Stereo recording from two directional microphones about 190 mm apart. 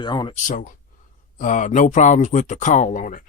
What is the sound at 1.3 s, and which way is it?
Speech, 40° left (ahead or behind).